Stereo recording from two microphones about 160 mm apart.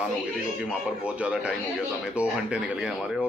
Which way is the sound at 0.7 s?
5° right (ahead or behind).